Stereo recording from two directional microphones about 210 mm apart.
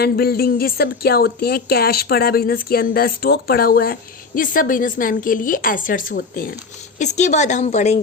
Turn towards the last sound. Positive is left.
turn(degrees=30)  # may be behind; listen again after turning